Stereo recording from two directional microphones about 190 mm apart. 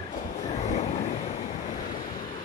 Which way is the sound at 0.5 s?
35° left (ahead or behind).